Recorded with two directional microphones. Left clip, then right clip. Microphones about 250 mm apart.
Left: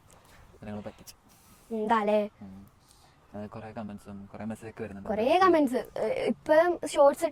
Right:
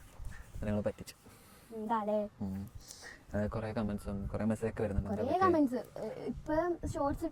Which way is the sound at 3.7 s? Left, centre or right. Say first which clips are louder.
Right 3 dB; right.